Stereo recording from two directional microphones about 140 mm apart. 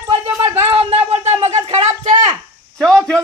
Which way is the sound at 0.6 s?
45° right (ahead or behind).